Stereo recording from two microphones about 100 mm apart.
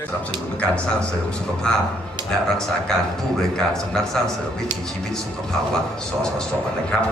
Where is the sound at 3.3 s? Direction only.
5° left (ahead or behind).